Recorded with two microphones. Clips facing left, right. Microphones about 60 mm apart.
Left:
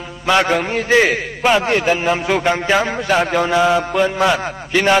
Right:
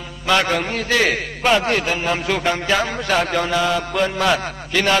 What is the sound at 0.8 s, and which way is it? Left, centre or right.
Speech, left.